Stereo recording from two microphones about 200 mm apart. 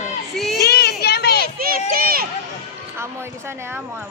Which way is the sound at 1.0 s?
55° left (ahead or behind).